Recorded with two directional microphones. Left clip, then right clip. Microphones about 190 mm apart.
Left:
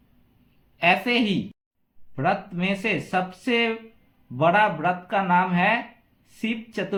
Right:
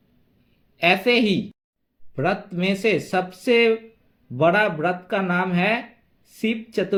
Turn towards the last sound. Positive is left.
turn(degrees=-35)  # may be behind; listen again after turning